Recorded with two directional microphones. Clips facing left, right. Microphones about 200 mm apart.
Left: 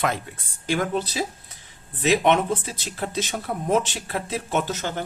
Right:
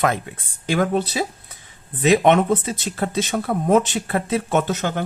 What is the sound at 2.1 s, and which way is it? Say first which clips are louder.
Speech: right 4 dB; 50° right (ahead or behind).